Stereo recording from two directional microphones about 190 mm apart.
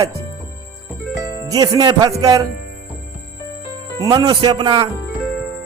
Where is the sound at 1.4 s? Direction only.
20° right (ahead or behind).